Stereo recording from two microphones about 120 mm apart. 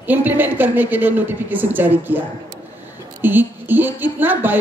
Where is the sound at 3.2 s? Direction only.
15° right (ahead or behind).